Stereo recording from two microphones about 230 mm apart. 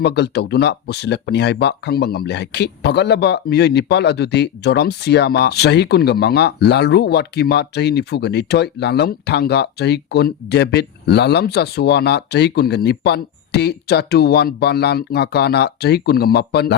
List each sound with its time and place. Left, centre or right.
0.0 s speech: left